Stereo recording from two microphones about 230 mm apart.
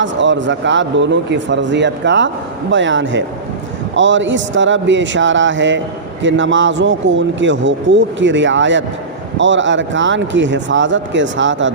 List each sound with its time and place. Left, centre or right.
0.0 s speech: right